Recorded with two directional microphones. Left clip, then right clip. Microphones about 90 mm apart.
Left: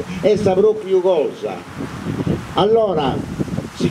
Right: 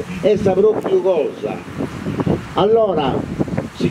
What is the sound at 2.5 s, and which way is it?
Speech, 30° left (ahead or behind).